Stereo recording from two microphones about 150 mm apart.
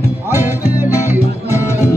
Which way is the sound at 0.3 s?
15° right (ahead or behind).